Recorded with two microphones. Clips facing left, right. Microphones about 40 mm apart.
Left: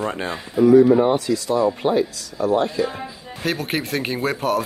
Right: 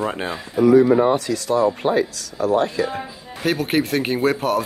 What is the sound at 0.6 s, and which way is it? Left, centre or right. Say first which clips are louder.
Speech: left 1 dB; right.